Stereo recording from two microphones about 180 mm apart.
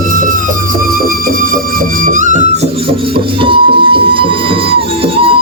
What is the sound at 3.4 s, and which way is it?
Music, 30° right (ahead or behind).